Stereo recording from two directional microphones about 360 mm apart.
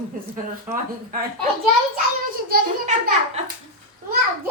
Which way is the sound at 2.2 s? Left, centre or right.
Right.